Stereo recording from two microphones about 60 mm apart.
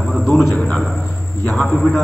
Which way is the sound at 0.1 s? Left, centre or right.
Centre.